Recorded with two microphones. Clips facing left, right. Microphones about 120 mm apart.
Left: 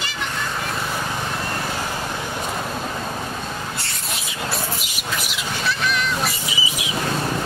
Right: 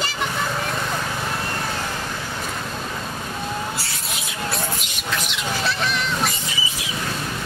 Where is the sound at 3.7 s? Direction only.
Centre (ahead or behind).